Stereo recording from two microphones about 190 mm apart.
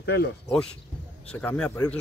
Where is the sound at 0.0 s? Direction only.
60° left (ahead or behind).